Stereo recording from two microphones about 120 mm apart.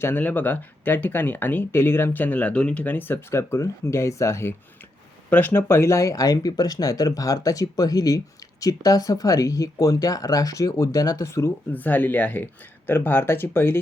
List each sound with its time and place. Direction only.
0.0 s speech: 15° left (ahead or behind)